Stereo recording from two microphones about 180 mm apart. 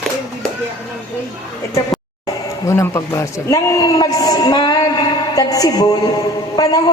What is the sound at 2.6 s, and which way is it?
A man's voice, 15° left (ahead or behind).